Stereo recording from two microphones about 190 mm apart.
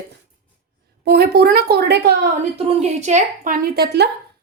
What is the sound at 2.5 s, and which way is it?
A woman's voice, 35° right (ahead or behind).